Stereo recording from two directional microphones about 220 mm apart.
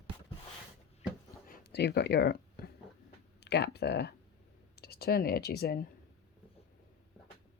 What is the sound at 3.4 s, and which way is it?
Speech, 50° left (ahead or behind).